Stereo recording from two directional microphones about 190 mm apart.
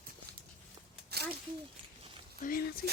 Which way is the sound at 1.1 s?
55° right (ahead or behind).